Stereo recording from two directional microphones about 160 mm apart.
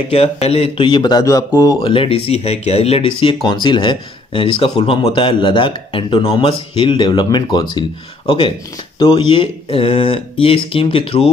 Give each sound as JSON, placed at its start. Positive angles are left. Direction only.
{"t": 0.1, "sound": "speech", "side_deg": 40}
{"t": 8.9, "sound": "speech", "side_deg": 30}